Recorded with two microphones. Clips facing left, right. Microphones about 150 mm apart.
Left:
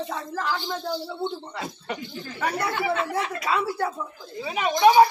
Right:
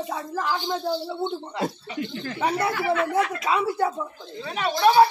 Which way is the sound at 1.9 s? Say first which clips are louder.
Right 6 dB; 65° right (ahead or behind).